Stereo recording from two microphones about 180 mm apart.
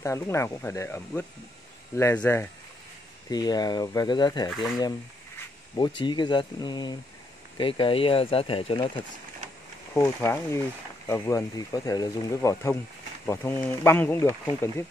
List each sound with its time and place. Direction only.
0.0 s speech: 15° left (ahead or behind)
4.5 s speech: centre (ahead or behind)
5.8 s speech: 25° left (ahead or behind)
9.9 s speech: 15° left (ahead or behind)